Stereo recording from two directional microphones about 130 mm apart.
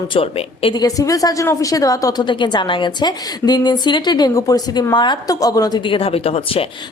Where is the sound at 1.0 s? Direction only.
25° left (ahead or behind); by 6.6 s 50° left (ahead or behind).